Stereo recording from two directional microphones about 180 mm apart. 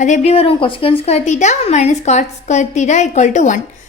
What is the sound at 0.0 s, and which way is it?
A woman's voice, 40° left (ahead or behind).